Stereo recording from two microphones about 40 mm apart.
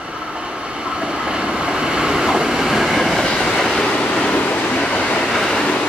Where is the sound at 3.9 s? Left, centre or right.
Left.